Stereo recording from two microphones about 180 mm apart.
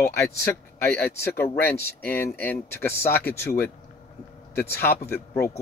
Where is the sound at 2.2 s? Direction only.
10° left (ahead or behind).